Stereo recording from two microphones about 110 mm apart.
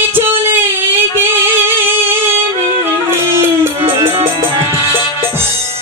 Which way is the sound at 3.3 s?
20° right (ahead or behind).